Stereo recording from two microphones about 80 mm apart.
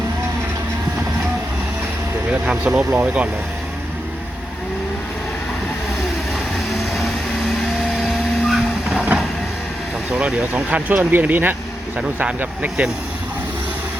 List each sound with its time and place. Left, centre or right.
2.5 s speech: centre
8.0 s vehicle: centre
8.9 s train: centre
10.1 s speech: centre